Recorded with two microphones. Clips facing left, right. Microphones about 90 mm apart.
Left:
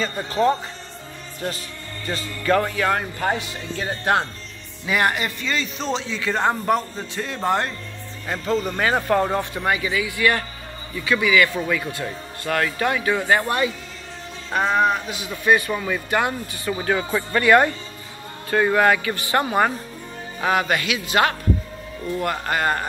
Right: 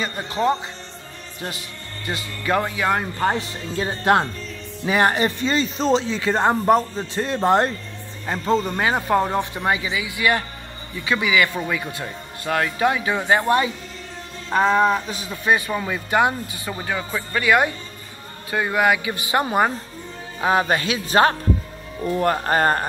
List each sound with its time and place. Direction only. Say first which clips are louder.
0.0 s speech: left 2 dB; 15° right (ahead or behind)
2.0 s speech: left 2 dB; 15° right (ahead or behind)
8.5 s speech: right 3 dB; 5° left (ahead or behind)
8.7 s speech: even; 15° right (ahead or behind)
16.7 s speech: left 4 dB; centre (ahead or behind); by 22.8 s 40° right (ahead or behind)